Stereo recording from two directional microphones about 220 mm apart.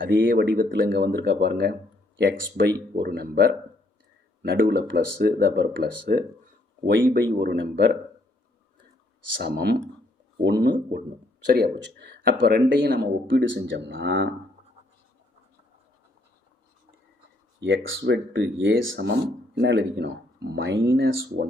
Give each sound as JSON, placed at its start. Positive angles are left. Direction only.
{"t": 0.0, "sound": "speech", "side_deg": -55}
{"t": 0.3, "sound": "speech", "side_deg": -40}
{"t": 9.4, "sound": "speech", "side_deg": -45}
{"t": 17.6, "sound": "speech", "side_deg": -60}